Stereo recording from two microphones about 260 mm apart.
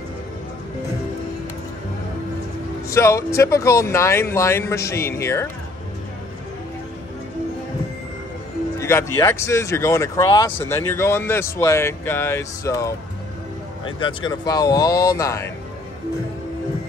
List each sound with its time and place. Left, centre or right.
2.9 s speech: centre
8.7 s speech: centre